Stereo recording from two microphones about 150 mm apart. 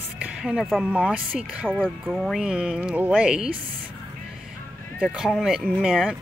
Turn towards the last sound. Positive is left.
turn(degrees=0)  # may be behind; listen again after turning